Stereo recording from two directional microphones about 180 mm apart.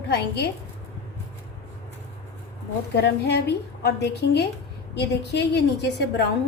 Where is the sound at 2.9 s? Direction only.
65° left (ahead or behind).